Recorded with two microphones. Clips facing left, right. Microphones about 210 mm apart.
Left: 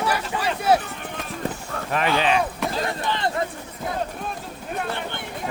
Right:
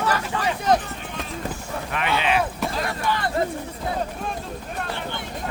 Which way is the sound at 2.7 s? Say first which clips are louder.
Even; 30° left (ahead or behind).